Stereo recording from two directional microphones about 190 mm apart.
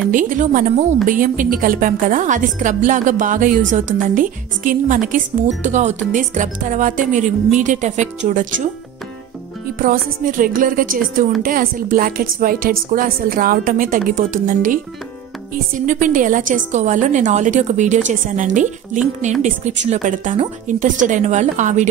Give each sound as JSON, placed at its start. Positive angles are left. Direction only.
{"t": 0.1, "sound": "a woman's voice", "side_deg": -45}
{"t": 9.8, "sound": "a woman's voice", "side_deg": -45}
{"t": 15.8, "sound": "a woman's voice", "side_deg": -45}